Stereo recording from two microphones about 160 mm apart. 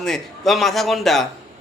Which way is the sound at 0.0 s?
Centre (ahead or behind).